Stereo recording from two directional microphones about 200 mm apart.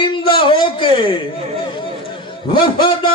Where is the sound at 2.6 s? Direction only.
25° left (ahead or behind).